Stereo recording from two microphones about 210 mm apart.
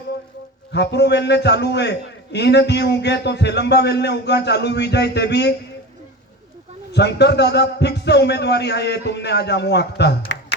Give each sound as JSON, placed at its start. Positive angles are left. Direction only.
{"t": 0.7, "sound": "a man's voice", "side_deg": 55}
{"t": 6.9, "sound": "a man's voice", "side_deg": 55}